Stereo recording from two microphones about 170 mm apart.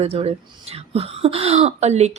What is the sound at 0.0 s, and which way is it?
Speech, 35° right (ahead or behind).